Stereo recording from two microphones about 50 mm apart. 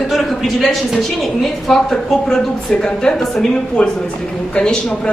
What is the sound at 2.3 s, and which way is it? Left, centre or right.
Speech, centre.